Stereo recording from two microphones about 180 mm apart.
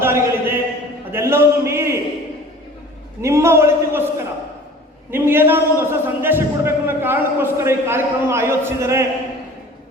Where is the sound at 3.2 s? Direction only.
15° right (ahead or behind).